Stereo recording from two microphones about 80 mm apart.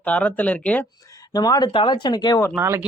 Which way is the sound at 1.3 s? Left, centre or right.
Left.